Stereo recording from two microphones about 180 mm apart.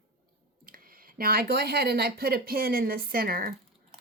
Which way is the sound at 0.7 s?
55° right (ahead or behind).